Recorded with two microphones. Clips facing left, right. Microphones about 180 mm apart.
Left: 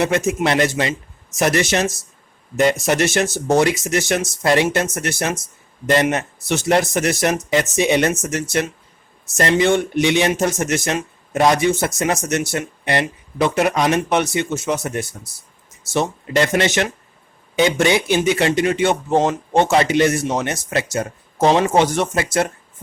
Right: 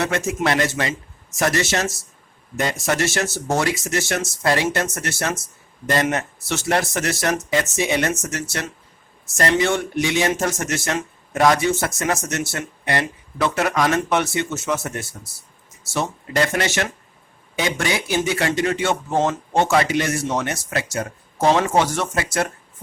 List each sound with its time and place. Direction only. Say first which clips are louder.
0.0 s speech: left 4 dB; 20° left (ahead or behind)